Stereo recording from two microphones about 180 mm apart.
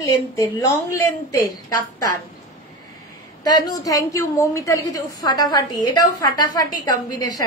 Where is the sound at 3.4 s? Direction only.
20° left (ahead or behind).